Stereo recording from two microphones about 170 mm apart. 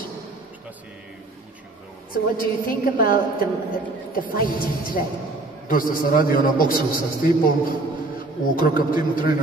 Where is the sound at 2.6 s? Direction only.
55° left (ahead or behind).